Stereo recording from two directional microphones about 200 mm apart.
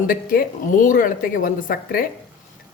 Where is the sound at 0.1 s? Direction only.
45° left (ahead or behind).